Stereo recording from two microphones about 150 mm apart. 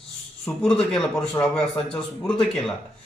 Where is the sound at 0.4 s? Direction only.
10° left (ahead or behind).